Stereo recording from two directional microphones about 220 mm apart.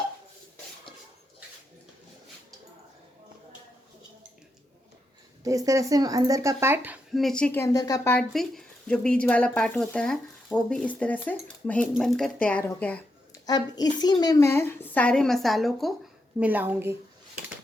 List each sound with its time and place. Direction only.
5.4 s speech: 15° right (ahead or behind); by 13.0 s 5° left (ahead or behind)
13.4 s a woman's voice: 20° left (ahead or behind); by 17.0 s 10° right (ahead or behind)